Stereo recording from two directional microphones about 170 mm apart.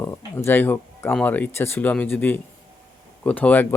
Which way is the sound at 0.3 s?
10° left (ahead or behind).